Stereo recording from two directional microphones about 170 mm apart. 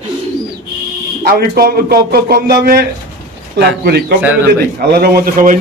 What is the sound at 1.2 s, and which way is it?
Speech, 60° right (ahead or behind).